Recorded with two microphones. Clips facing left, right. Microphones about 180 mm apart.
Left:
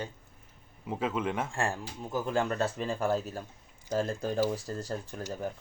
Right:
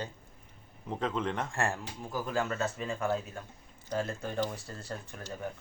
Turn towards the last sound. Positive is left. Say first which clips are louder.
# left 4 dB
turn(degrees=30)  # may be behind; listen again after turning